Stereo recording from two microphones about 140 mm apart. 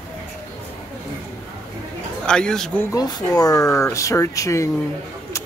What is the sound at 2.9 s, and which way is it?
Speech, 25° left (ahead or behind).